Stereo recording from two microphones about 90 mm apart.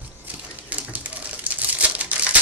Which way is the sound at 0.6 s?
20° right (ahead or behind).